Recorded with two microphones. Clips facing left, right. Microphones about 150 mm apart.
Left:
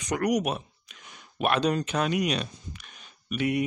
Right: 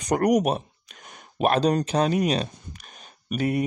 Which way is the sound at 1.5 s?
35° right (ahead or behind).